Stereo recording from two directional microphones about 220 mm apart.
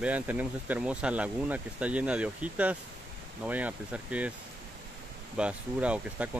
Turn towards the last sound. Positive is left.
turn(degrees=-5)  # may be behind; listen again after turning